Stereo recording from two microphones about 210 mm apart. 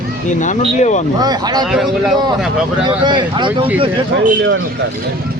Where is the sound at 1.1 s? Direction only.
20° right (ahead or behind).